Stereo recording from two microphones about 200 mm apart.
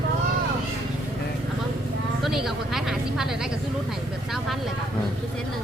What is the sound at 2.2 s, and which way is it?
Vehicle, centre (ahead or behind).